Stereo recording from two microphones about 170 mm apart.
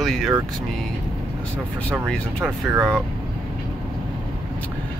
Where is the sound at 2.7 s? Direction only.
15° right (ahead or behind).